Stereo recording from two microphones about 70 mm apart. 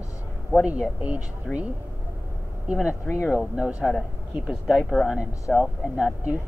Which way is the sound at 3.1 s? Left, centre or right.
Left.